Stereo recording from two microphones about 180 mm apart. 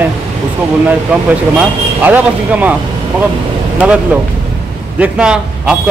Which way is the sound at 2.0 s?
10° right (ahead or behind).